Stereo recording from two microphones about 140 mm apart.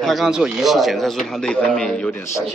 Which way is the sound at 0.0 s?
Centre (ahead or behind).